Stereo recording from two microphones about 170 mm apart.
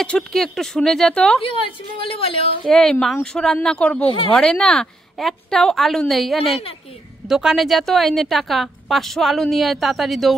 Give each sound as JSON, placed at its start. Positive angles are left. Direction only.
{"t": 0.0, "sound": "a woman's voice", "side_deg": 5}
{"t": 1.4, "sound": "a woman's voice", "side_deg": 30}
{"t": 2.7, "sound": "a woman's voice", "side_deg": 5}